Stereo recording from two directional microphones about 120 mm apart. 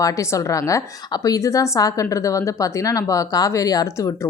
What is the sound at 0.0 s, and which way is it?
A woman's voice, 25° left (ahead or behind).